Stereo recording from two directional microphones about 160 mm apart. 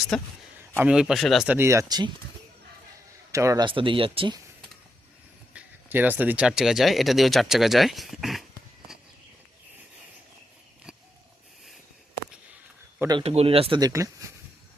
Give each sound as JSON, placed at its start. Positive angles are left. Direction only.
{"t": 0.1, "sound": "speech", "side_deg": 5}
{"t": 1.5, "sound": "speech", "side_deg": -15}
{"t": 3.3, "sound": "speech", "side_deg": -20}
{"t": 3.7, "sound": "speech", "side_deg": -30}
{"t": 5.5, "sound": "speech", "side_deg": -10}
{"t": 13.1, "sound": "speech", "side_deg": -35}